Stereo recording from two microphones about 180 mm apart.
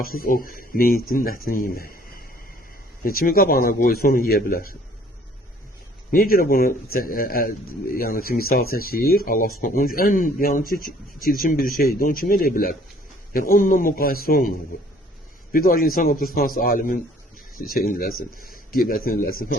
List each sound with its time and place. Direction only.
0.0 s speech: 55° left (ahead or behind)
6.1 s speech: 55° left (ahead or behind)
15.5 s speech: 50° left (ahead or behind)
16.6 s a sound: 50° left (ahead or behind)
17.7 s speech: 55° left (ahead or behind)